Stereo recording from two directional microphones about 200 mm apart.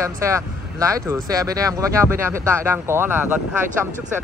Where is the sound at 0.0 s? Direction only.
15° right (ahead or behind).